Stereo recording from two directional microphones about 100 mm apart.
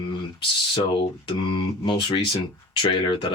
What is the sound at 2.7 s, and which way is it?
Speech, 60° left (ahead or behind).